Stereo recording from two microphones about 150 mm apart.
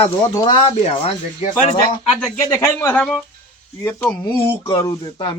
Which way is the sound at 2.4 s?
20° left (ahead or behind).